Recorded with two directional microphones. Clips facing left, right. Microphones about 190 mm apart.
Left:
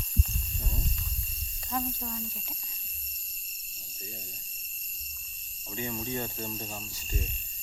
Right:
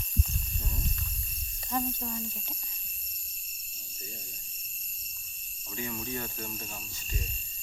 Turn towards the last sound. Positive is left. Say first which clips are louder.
# left 3 dB
turn(degrees=25)  # may be behind; listen again after turning